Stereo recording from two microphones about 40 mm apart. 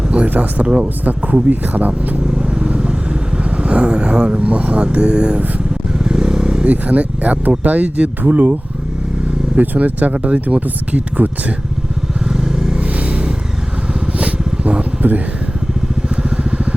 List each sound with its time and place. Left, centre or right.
0.1 s a sound: right
0.6 s speech: right
1.0 s speech: right
2.3 s vehicle: right
6.1 s motorcycle: centre
6.7 s speech: right
9.6 s speech: right
12.2 s vehicle: centre
12.8 s vehicle: right
14.2 s a sound: right
16.0 s vehicle: right